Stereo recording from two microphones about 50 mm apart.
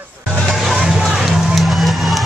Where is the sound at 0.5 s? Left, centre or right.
Centre.